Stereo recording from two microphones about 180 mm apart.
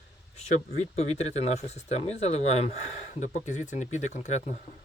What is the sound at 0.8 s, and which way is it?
Speech, 40° left (ahead or behind).